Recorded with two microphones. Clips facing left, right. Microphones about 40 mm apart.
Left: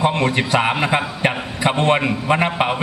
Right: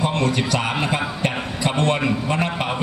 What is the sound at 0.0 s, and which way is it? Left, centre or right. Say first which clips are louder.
A man's voice: left 3 dB; left.